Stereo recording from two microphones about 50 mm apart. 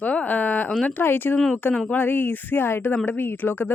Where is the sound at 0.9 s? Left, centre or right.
Left.